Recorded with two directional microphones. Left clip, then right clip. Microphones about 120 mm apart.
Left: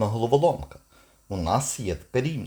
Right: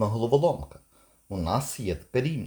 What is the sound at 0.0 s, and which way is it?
Speech, 15° left (ahead or behind).